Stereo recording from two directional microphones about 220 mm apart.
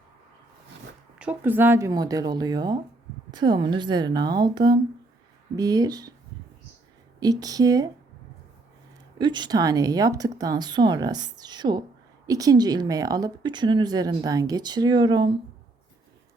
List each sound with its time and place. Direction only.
1.2 s a woman's voice: 5° right (ahead or behind)
7.2 s speech: 15° right (ahead or behind)
9.1 s speech: 20° right (ahead or behind)